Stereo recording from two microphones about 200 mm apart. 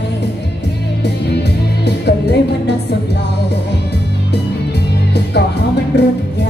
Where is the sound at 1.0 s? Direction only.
55° left (ahead or behind).